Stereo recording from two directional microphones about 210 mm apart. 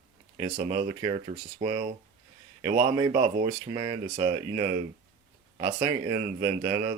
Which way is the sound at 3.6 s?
25° right (ahead or behind).